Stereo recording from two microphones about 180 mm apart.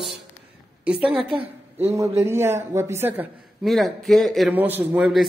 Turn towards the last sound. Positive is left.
turn(degrees=-5)  # may be behind; listen again after turning